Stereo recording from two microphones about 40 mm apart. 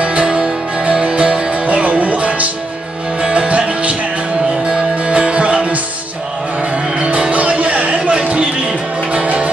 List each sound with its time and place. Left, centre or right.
0.0 s music: right
7.0 s music: right